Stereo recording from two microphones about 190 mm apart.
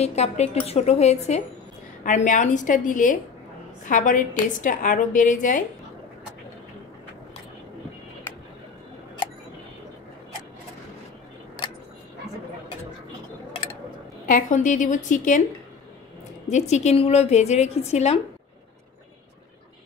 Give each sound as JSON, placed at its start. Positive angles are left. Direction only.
{"t": 0.0, "sound": "a woman's voice", "side_deg": 35}
{"t": 14.2, "sound": "a woman's voice", "side_deg": 45}
{"t": 16.4, "sound": "a woman's voice", "side_deg": 35}